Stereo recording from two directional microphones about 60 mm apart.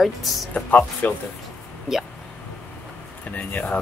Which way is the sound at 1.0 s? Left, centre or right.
Left.